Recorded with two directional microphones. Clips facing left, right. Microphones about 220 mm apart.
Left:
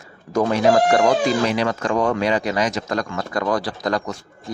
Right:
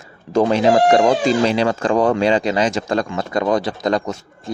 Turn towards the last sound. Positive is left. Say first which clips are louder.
# right 4 dB
turn(degrees=-25)  # may be behind; listen again after turning